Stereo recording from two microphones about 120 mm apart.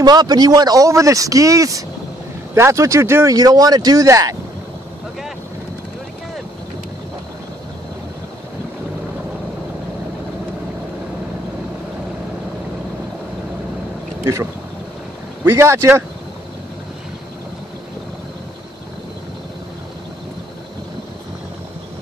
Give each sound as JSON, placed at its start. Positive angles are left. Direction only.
{"t": 0.0, "sound": "speech", "side_deg": -35}
{"t": 14.2, "sound": "speech", "side_deg": -25}